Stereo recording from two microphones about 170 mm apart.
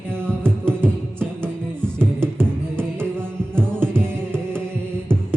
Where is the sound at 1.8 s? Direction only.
15° right (ahead or behind).